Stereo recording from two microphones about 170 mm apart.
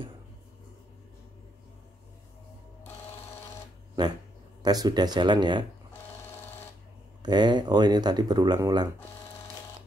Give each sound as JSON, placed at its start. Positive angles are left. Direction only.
{"t": 4.0, "sound": "speech", "side_deg": -25}
{"t": 7.2, "sound": "speech", "side_deg": -25}